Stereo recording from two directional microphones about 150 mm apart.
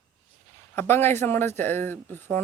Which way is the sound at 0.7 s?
15° left (ahead or behind).